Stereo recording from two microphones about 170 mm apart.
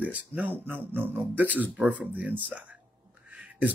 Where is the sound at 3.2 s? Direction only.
10° right (ahead or behind).